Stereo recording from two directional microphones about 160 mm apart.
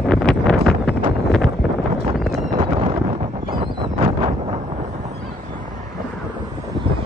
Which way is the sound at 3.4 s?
35° right (ahead or behind).